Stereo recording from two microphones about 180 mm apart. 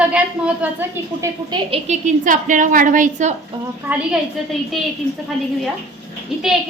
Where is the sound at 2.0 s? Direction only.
45° right (ahead or behind).